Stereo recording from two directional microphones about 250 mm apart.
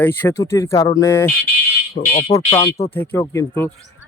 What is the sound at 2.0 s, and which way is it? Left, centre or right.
Speech, left.